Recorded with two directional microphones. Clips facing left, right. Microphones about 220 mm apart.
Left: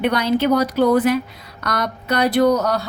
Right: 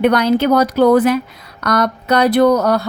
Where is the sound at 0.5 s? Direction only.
90° right.